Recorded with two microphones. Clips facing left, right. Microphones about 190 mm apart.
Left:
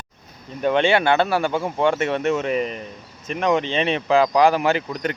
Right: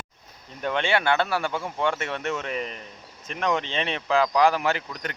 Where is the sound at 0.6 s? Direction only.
20° left (ahead or behind).